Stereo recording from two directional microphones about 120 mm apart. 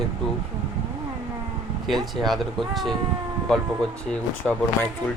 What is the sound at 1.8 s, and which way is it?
Speech, centre (ahead or behind).